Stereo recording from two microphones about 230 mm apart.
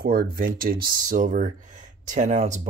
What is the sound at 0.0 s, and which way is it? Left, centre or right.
Speech, right.